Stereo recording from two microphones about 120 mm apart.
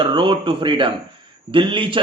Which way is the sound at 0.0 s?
40° right (ahead or behind).